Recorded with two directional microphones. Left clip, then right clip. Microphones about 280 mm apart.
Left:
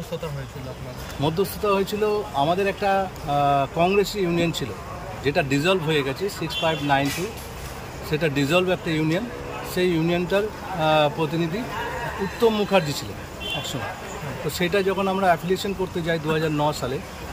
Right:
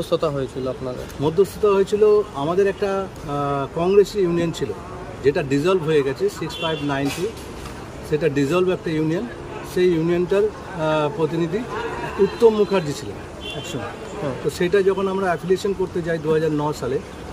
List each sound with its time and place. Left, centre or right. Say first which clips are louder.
1.2 s speech: right 5 dB; centre
8.1 s speech: right 2 dB; centre
12.4 s speech: right 1 dB; centre
14.6 s speech: right 4 dB; centre